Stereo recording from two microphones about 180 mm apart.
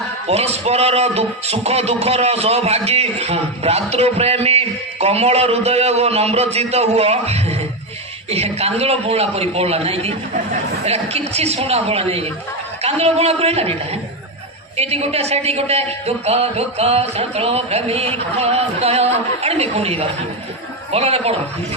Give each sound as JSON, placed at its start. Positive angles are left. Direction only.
{"t": 0.3, "sound": "a man's voice", "side_deg": -35}